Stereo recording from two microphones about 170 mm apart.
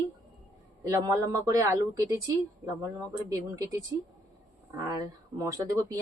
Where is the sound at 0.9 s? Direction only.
15° right (ahead or behind).